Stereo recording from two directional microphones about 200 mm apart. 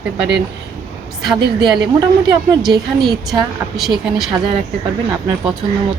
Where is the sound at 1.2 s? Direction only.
Centre (ahead or behind).